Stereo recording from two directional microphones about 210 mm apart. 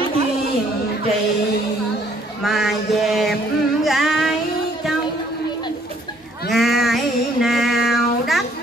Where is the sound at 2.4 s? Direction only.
Centre (ahead or behind).